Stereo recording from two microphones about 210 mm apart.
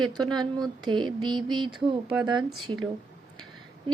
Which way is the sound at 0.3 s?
20° right (ahead or behind).